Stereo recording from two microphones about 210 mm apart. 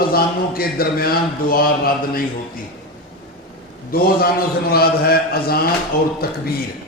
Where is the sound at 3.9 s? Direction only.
45° left (ahead or behind).